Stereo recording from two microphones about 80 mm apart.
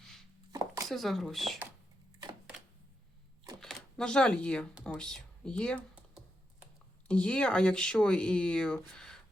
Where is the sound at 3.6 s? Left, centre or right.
Centre.